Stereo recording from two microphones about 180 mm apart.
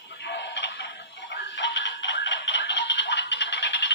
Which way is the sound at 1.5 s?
80° left.